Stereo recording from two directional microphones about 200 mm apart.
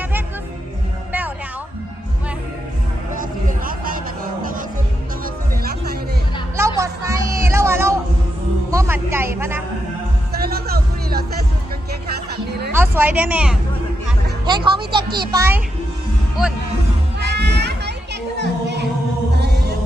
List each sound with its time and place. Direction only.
3.2 s a sound: 45° right (ahead or behind)
6.6 s a sound: 15° right (ahead or behind)
10.4 s music: 50° right (ahead or behind)
12.7 s speech: 10° right (ahead or behind)
14.4 s a child's voice: 25° right (ahead or behind)
17.3 s children playing: 55° right (ahead or behind)
19.4 s music: 55° right (ahead or behind)